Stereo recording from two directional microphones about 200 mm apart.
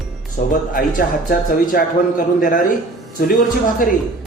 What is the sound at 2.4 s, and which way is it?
A man's voice, 45° left (ahead or behind).